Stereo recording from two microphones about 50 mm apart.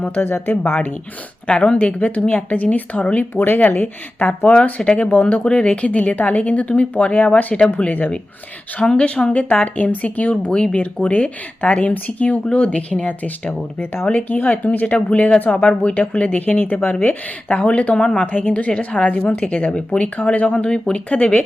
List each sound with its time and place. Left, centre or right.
0.0 s speech: left
1.5 s a woman's voice: left
3.4 s speech: left
4.8 s a woman's voice: left
5.0 s a woman's voice: left
7.5 s speech: centre
7.9 s speech: left
8.8 s a woman's voice: centre
10.4 s a woman's voice: centre; by 14.9 s left
14.9 s a woman's voice: left
18.3 s a woman's voice: left
19.2 s a woman's voice: left; by 21.0 s centre
21.1 s a woman's voice: left